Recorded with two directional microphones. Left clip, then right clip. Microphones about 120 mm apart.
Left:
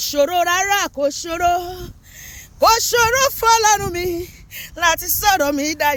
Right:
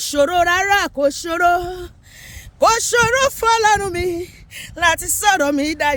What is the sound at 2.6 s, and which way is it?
Speech, 35° right (ahead or behind).